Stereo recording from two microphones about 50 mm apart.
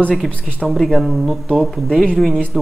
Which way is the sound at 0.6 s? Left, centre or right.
Centre.